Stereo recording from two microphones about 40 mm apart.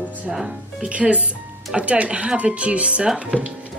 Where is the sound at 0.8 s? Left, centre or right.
Right.